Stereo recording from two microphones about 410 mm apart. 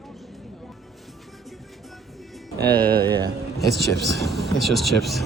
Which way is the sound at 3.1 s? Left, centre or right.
Centre.